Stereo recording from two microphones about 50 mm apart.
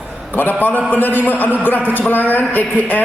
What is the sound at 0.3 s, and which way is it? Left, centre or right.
A man's voice, left.